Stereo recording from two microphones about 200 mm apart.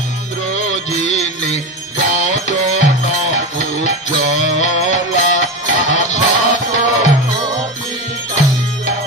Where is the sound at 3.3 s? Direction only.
35° left (ahead or behind).